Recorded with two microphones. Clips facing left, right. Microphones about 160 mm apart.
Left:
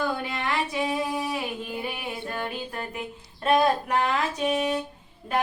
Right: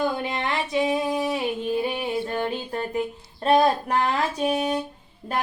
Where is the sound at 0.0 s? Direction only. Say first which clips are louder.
Right 3 dB; 20° right (ahead or behind).